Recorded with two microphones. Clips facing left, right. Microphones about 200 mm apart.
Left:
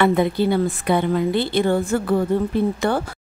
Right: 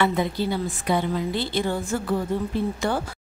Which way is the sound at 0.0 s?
55° left (ahead or behind).